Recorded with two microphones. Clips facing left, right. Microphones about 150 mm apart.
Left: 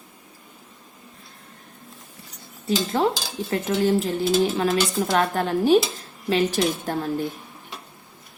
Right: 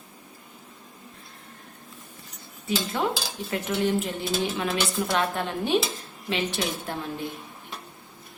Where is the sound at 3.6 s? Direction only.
35° left (ahead or behind).